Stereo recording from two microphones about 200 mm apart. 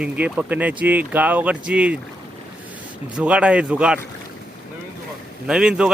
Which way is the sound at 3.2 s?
5° right (ahead or behind).